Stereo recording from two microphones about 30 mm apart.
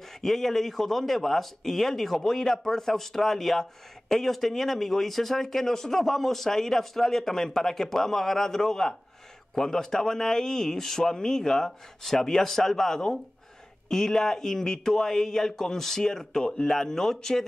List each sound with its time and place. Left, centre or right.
0.2 s speech: centre